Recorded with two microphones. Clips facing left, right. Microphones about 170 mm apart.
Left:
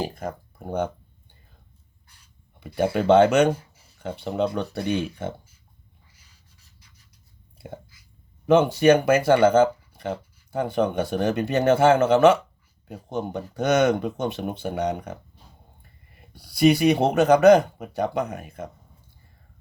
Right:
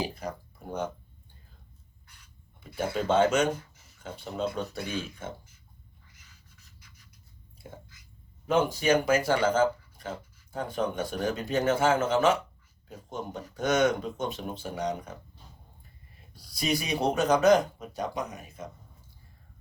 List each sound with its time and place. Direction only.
0.0 s a sound: 50° left (ahead or behind)
2.6 s speech: 65° left (ahead or behind)
8.4 s speech: 65° left (ahead or behind)
16.3 s speech: 65° left (ahead or behind)